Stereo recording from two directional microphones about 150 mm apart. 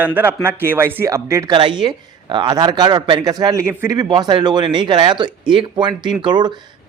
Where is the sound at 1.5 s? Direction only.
30° right (ahead or behind).